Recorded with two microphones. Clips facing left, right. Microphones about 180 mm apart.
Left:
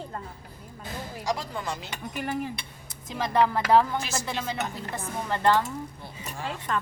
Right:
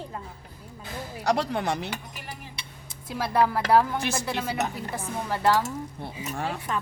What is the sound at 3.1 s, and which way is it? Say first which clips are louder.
A woman's voice: even; 5° right (ahead or behind).